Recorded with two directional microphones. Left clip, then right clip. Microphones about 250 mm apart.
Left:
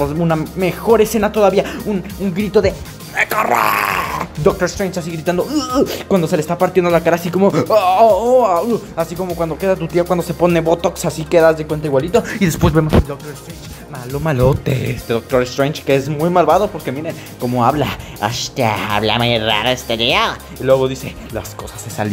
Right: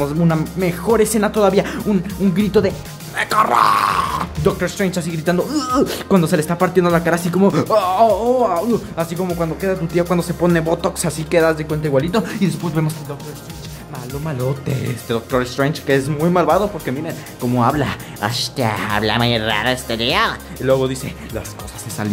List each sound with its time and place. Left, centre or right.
0.0 s speech: centre
12.3 s speech: centre
14.2 s speech: left
14.7 s speech: centre